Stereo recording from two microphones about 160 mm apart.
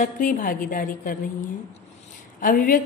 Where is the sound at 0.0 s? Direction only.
55° left (ahead or behind).